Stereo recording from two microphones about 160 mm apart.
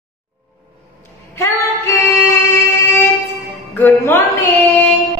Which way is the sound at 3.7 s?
10° left (ahead or behind).